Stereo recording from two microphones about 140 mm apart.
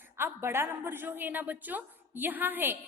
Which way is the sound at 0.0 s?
15° right (ahead or behind).